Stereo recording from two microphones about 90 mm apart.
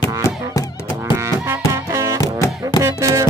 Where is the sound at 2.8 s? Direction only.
35° right (ahead or behind).